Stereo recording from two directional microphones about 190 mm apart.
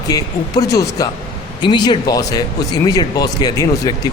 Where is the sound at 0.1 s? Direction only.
20° left (ahead or behind).